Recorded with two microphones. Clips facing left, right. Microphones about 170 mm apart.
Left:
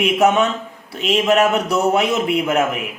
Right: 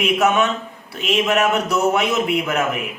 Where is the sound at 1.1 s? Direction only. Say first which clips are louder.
Left 3 dB; 35° left (ahead or behind).